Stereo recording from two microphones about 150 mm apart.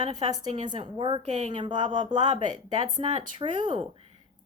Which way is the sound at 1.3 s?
50° right (ahead or behind).